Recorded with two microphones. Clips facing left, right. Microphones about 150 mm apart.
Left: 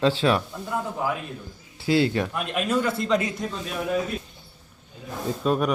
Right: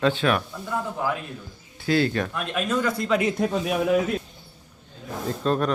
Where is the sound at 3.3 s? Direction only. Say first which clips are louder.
Right 7 dB; 75° right (ahead or behind).